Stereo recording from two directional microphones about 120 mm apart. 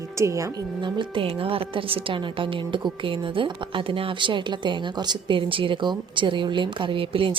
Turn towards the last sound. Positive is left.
turn(degrees=-45)  # may be behind; listen again after turning